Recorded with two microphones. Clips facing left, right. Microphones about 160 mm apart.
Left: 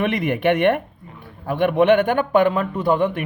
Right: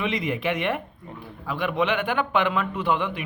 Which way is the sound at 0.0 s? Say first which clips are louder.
Left 6 dB; 60° left (ahead or behind).